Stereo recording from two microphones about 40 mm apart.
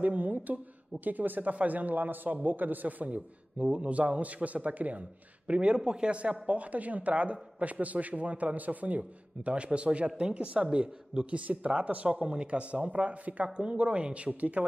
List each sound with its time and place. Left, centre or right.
0.0 s speech: right
3.5 s a woman's voice: right
12.1 s a woman's voice: right